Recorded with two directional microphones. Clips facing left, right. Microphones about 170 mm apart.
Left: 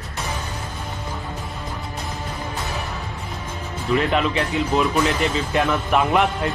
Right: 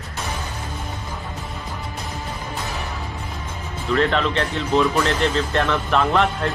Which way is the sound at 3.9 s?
10° left (ahead or behind).